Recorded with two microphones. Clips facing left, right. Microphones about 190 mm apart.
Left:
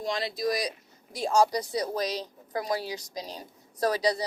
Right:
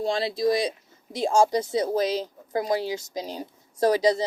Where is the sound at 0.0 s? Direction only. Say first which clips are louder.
Right 5 dB; 30° right (ahead or behind).